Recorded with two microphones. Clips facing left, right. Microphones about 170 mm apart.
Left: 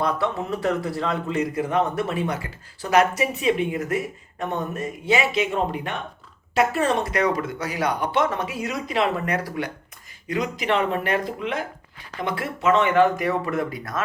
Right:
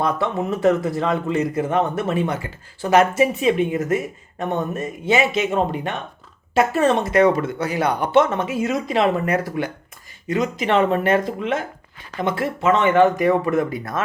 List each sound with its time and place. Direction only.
0.0 s speech: 20° right (ahead or behind)